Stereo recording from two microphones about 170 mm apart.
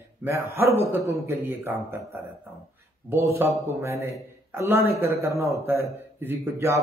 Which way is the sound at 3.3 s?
15° right (ahead or behind).